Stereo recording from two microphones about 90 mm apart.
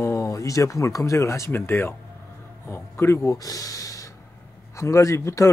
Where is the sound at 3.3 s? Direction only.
40° left (ahead or behind).